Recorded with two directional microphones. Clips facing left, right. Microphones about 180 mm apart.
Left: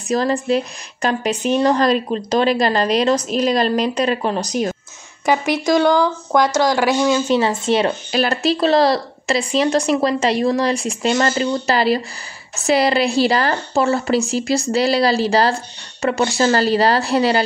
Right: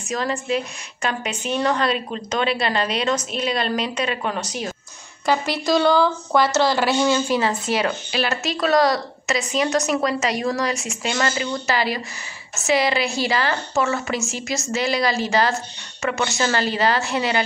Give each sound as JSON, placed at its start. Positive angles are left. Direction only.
{"t": 0.1, "sound": "a woman's voice", "side_deg": 35}
{"t": 5.2, "sound": "speech", "side_deg": 15}
{"t": 7.1, "sound": "speech", "side_deg": 25}
{"t": 8.1, "sound": "a woman's voice", "side_deg": 40}